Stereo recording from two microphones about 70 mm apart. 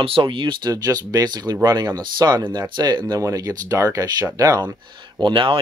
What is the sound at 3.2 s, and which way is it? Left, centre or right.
Speech, right.